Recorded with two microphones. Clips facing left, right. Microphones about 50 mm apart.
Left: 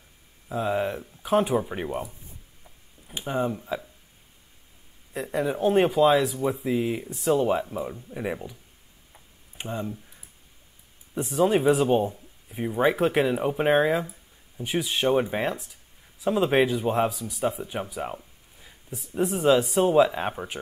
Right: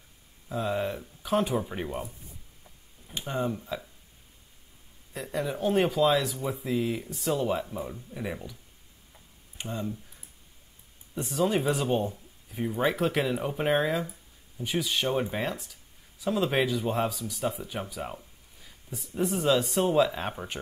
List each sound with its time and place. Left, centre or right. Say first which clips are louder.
0.5 s speech: left 3 dB; centre
2.6 s a sound: left 2 dB; centre
5.1 s speech: left 5 dB; centre
9.1 s tick-tock: left 2 dB; centre
11.1 s speech: left 5 dB; centre
17.1 s speech: left 1 dB; centre
17.4 s speech: left 5 dB; centre
18.9 s speech: left 3 dB; centre